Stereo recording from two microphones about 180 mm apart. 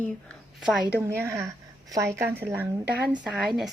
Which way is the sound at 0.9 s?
15° right (ahead or behind).